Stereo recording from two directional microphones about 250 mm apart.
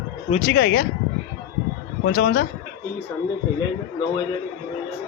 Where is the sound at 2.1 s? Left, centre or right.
Left.